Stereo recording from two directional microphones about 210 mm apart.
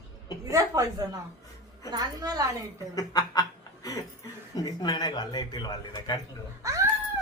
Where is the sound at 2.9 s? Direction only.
15° left (ahead or behind).